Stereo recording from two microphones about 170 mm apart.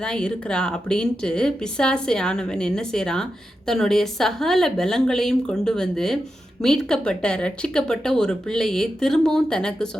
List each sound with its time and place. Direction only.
0.0 s speech: 5° left (ahead or behind)